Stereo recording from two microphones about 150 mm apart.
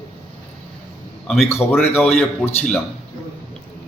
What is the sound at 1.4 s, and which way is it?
Speech, 15° left (ahead or behind).